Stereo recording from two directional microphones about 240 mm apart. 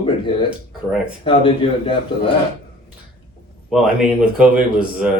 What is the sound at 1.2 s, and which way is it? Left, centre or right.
Speech, left.